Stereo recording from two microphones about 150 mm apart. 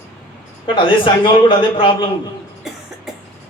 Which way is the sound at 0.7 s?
35° left (ahead or behind).